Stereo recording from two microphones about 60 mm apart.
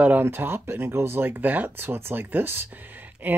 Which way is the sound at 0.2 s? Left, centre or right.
Right.